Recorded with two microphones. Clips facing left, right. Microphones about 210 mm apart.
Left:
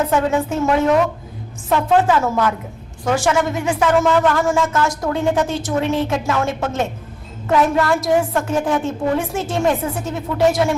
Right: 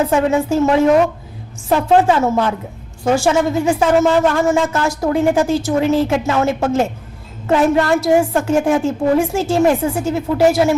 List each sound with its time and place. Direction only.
0.1 s a woman's voice: 25° right (ahead or behind)